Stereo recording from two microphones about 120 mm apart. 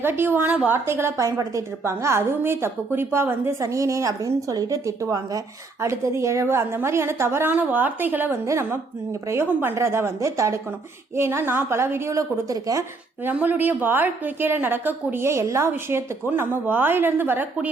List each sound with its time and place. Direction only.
0.0 s a woman's voice: 20° right (ahead or behind)
13.2 s a woman's voice: 15° right (ahead or behind)